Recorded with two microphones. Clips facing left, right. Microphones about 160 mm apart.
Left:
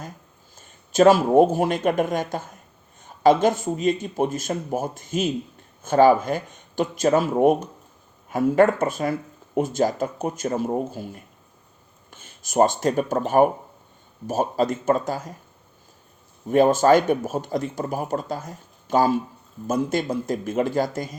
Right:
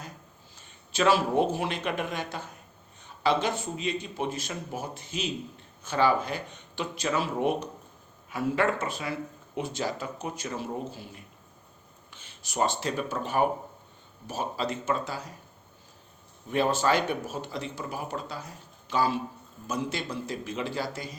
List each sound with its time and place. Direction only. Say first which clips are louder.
0.5 s speech: left 11 dB; 45° left (ahead or behind)
16.5 s speech: left 9 dB; 45° left (ahead or behind)